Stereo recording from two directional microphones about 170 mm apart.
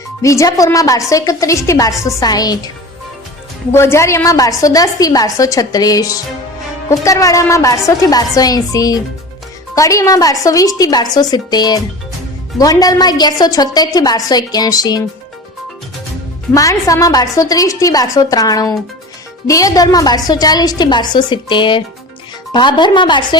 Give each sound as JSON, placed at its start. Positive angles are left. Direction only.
{"t": 0.2, "sound": "a woman's voice", "side_deg": 20}
{"t": 3.7, "sound": "a woman's voice", "side_deg": 15}
{"t": 16.6, "sound": "a woman's voice", "side_deg": 20}